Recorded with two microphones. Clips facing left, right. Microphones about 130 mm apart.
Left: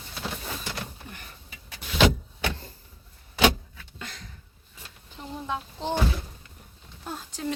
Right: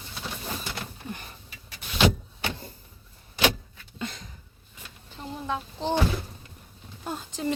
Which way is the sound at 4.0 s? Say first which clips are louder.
Right 7 dB; 20° right (ahead or behind).